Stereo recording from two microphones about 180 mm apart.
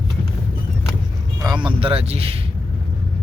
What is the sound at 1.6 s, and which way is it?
Speech, 30° right (ahead or behind).